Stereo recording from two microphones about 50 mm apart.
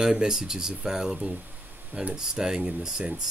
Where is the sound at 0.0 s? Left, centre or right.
Centre.